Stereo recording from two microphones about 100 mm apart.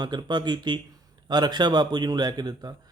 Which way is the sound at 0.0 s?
45° right (ahead or behind).